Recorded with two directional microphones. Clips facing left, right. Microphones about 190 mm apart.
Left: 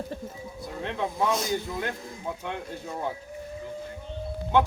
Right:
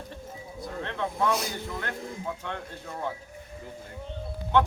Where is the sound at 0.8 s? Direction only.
15° left (ahead or behind).